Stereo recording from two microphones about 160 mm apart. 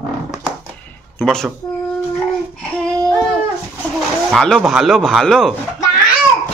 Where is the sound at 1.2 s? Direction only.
5° left (ahead or behind).